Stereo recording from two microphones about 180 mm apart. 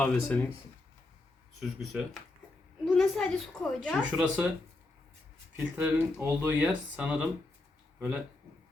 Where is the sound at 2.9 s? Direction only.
Centre (ahead or behind).